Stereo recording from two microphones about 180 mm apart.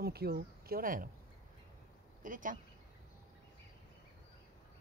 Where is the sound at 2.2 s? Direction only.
45° right (ahead or behind).